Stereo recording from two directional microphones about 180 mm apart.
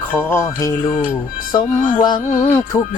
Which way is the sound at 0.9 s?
45° left (ahead or behind).